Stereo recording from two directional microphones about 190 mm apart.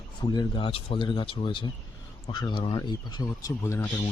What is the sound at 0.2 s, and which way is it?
Speech, 25° left (ahead or behind).